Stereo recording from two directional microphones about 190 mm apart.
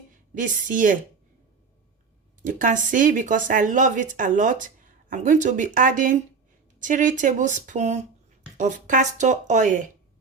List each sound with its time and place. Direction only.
0.1 s a woman's voice: 45° right (ahead or behind)
2.4 s speech: 45° right (ahead or behind)